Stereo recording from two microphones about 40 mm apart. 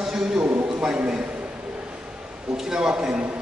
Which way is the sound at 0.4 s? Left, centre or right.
Right.